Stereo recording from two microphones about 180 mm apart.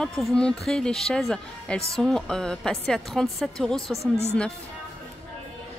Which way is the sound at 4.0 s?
35° left (ahead or behind).